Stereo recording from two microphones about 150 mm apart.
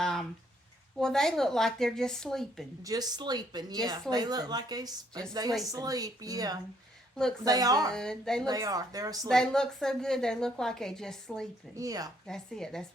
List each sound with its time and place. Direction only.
0.0 s a sound: 5° left (ahead or behind)
0.9 s a woman's voice: 5° left (ahead or behind)
2.8 s a woman's voice: 25° right (ahead or behind)
7.9 s a woman's voice: 5° left (ahead or behind)
8.4 s a woman's voice: 25° right (ahead or behind)
9.3 s a woman's voice: 5° left (ahead or behind)
11.8 s a woman's voice: 25° right (ahead or behind)
12.2 s a woman's voice: 5° left (ahead or behind)